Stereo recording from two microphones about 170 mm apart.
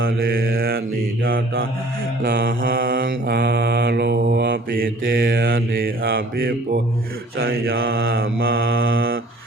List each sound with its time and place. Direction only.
0.2 s mantra: 60° right (ahead or behind)
2.2 s mantra: 60° right (ahead or behind)
8.0 s mantra: 65° right (ahead or behind)